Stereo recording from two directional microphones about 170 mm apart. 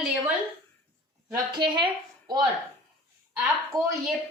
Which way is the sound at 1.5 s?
30° right (ahead or behind).